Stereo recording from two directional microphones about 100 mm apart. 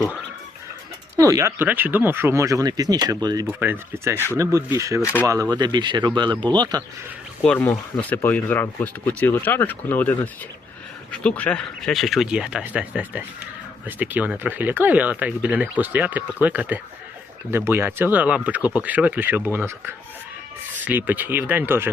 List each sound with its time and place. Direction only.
1.1 s speech: 30° right (ahead or behind)
1.6 s speech: 20° right (ahead or behind); by 3.4 s 40° right (ahead or behind)
3.6 s speech: 20° right (ahead or behind); by 6.8 s 45° right (ahead or behind)
7.4 s speech: 15° left (ahead or behind); by 21.8 s 20° right (ahead or behind)